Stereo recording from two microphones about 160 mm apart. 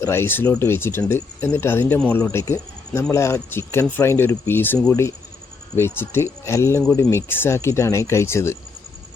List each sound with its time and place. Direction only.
0.0 s speech: 15° left (ahead or behind)